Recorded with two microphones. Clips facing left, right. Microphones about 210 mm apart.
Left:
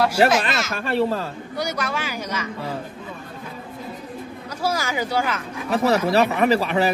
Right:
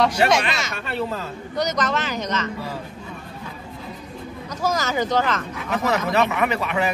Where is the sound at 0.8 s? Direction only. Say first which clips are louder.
Left 6 dB; 35° left (ahead or behind).